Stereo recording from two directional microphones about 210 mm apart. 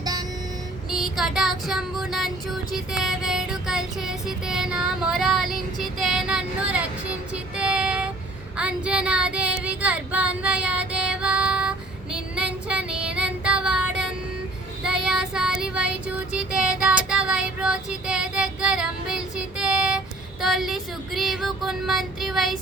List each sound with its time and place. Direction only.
0.0 s vehicle: 20° right (ahead or behind)
0.9 s a sound: centre (ahead or behind)
8.5 s child singing: 5° right (ahead or behind)